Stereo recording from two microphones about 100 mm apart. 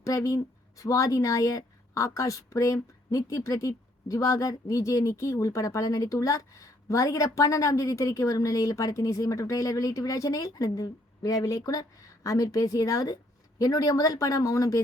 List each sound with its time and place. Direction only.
0.0 s a woman's voice: 35° left (ahead or behind)